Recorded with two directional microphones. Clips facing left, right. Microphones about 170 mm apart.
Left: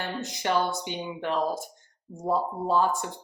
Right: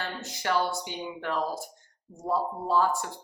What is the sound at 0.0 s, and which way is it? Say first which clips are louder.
A woman's voice: left 3 dB; 20° left (ahead or behind).